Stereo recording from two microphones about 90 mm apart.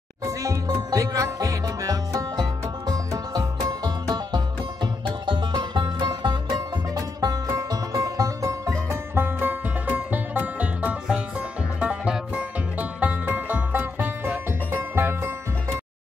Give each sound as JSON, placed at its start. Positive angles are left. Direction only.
{"t": 0.2, "sound": "music", "side_deg": -40}
{"t": 7.2, "sound": "music", "side_deg": -40}